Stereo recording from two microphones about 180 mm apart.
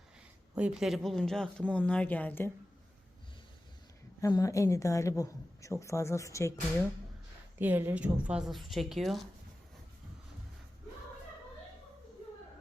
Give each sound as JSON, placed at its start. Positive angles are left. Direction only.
{"t": 0.5, "sound": "speech", "side_deg": -5}
{"t": 4.2, "sound": "a woman's voice", "side_deg": 20}
{"t": 7.6, "sound": "speech", "side_deg": -10}